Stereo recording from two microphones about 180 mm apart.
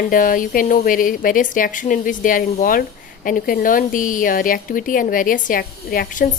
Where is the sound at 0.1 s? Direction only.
50° left (ahead or behind).